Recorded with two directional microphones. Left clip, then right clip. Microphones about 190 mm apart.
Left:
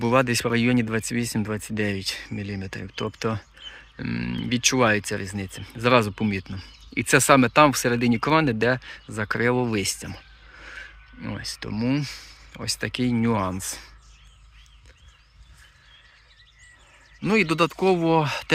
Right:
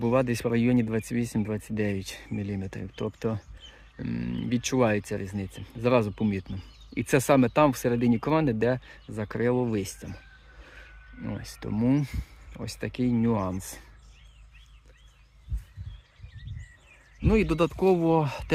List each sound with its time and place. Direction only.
0.0 s speech: 5° right (ahead or behind); by 12.3 s 25° right (ahead or behind)
12.5 s speech: 5° right (ahead or behind)
17.2 s speech: 5° right (ahead or behind)